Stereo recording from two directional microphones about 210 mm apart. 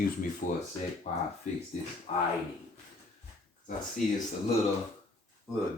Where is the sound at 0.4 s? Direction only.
40° left (ahead or behind).